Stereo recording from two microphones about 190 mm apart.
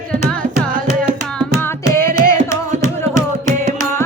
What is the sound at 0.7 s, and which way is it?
Music, 45° right (ahead or behind).